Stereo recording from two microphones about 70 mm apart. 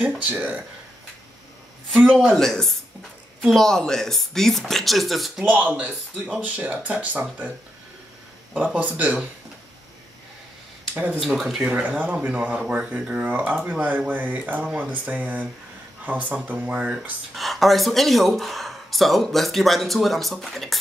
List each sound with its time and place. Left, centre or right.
0.2 s speech: right
2.1 s speech: centre
5.4 s speech: right
6.1 s speech: centre
8.5 s speech: centre
11.1 s speech: centre
11.6 s speech: centre
14.6 s speech: centre
14.9 s speech: right
17.4 s speech: centre